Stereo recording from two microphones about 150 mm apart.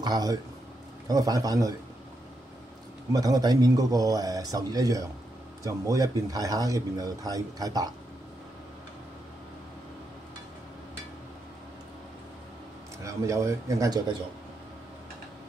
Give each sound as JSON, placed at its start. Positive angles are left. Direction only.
{"t": 0.0, "sound": "speech", "side_deg": -25}
{"t": 3.1, "sound": "speech", "side_deg": -25}
{"t": 13.0, "sound": "speech", "side_deg": -20}